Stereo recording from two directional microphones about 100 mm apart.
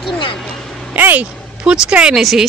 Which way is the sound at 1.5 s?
10° right (ahead or behind).